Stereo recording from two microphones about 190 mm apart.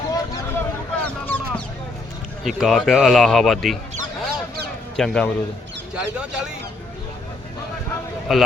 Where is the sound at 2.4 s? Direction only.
Centre (ahead or behind).